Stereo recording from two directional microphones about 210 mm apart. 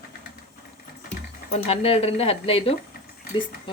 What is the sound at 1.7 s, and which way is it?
Speech, 25° left (ahead or behind).